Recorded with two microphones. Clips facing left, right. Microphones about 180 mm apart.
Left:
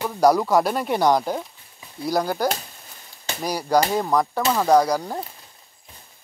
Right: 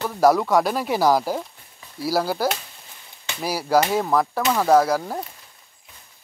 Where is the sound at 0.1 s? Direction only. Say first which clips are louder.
Even; centre (ahead or behind).